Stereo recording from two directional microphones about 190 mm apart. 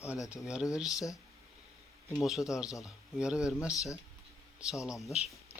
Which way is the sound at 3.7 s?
15° left (ahead or behind).